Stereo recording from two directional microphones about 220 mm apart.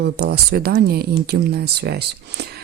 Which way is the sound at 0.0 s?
45° right (ahead or behind).